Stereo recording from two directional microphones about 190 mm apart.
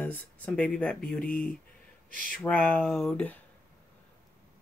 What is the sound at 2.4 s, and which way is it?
Speech, 10° left (ahead or behind).